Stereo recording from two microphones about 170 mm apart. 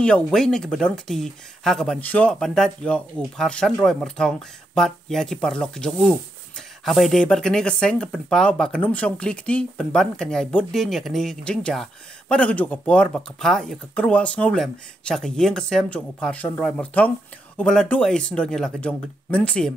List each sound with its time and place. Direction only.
0.0 s speech: 5° left (ahead or behind)